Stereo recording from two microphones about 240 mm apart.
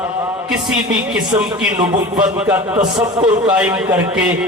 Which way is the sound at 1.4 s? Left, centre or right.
Centre.